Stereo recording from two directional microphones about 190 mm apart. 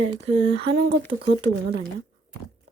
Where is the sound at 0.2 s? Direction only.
30° right (ahead or behind).